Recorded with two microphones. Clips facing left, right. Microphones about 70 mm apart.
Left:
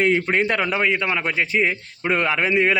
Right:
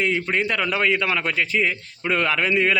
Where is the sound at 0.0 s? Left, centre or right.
Left.